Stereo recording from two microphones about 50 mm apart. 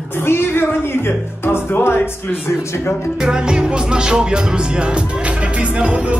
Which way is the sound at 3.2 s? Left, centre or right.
Centre.